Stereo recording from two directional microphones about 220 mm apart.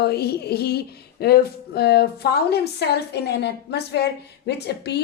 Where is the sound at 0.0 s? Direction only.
45° left (ahead or behind).